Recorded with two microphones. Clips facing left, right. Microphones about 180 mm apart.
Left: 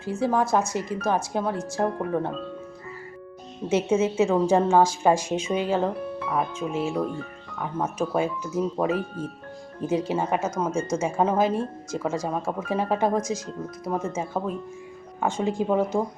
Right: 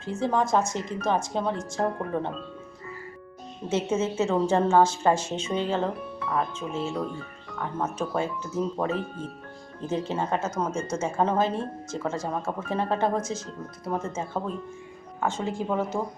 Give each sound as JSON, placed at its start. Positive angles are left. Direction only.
{"t": 0.0, "sound": "a woman's voice", "side_deg": 10}
{"t": 3.7, "sound": "a woman's voice", "side_deg": 15}